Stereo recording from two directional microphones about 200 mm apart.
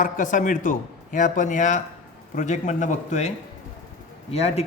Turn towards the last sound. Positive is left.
turn(degrees=30)  # may be behind; listen again after turning